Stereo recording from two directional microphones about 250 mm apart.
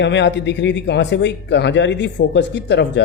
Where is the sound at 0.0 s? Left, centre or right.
Left.